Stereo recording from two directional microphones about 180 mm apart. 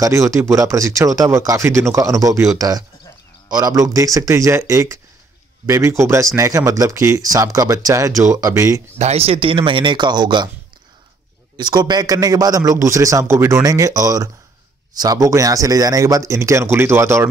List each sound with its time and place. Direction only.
0.0 s speech: 15° right (ahead or behind)
8.9 s a man's voice: 35° right (ahead or behind)
11.5 s a man's voice: 25° right (ahead or behind)